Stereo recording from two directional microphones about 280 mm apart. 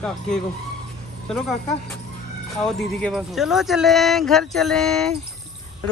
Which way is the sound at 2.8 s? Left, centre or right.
Centre.